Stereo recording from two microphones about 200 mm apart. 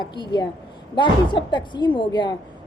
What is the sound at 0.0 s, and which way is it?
A woman's voice, 20° left (ahead or behind).